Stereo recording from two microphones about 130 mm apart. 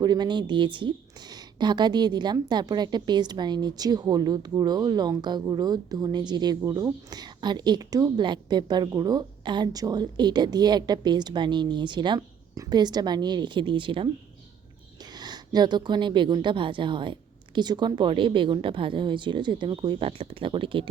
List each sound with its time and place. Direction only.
0.0 s a woman's voice: 35° right (ahead or behind)
15.1 s a woman's voice: 30° right (ahead or behind)